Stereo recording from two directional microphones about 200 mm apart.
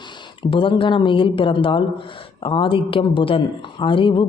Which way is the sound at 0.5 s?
25° left (ahead or behind).